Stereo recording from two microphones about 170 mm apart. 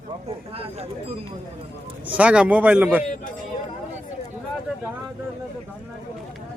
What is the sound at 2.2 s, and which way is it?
Speech, 5° right (ahead or behind).